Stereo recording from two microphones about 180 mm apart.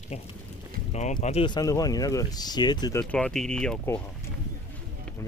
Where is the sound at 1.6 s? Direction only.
20° left (ahead or behind).